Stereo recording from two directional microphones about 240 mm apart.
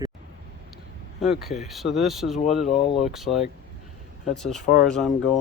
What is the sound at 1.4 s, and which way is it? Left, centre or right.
Speech, centre.